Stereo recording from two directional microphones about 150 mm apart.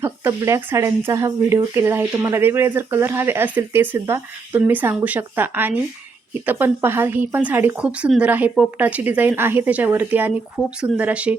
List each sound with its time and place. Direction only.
0.0 s speech: 20° right (ahead or behind)